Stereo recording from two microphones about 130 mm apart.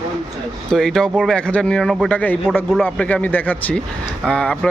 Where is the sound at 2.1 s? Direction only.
10° left (ahead or behind).